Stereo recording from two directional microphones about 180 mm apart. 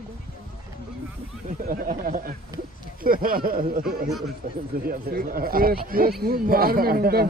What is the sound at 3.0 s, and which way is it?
Speech, 55° right (ahead or behind).